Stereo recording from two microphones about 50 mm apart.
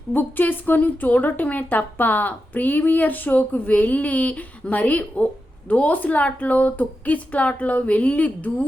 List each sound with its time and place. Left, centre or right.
0.1 s a woman's voice: left